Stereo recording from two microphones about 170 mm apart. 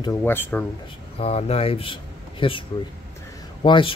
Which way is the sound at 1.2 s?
35° left (ahead or behind).